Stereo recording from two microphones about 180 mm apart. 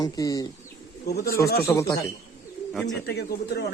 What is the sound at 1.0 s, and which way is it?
Speech, 55° left (ahead or behind).